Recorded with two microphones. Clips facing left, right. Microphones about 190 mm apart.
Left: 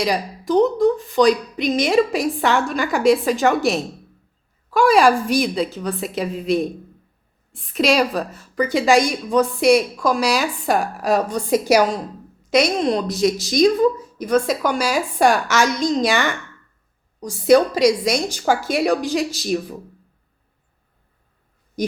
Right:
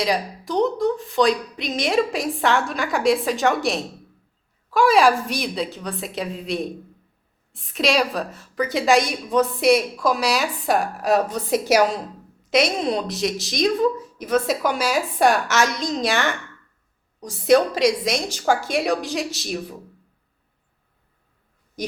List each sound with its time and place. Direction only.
0.0 s a woman's voice: centre (ahead or behind)